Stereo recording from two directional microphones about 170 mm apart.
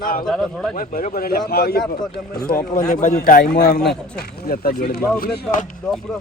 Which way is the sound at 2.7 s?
45° left (ahead or behind).